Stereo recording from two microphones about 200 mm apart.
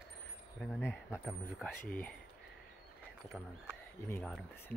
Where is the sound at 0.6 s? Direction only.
5° left (ahead or behind).